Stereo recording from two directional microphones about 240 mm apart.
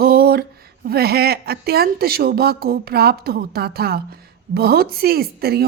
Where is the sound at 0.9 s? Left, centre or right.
Right.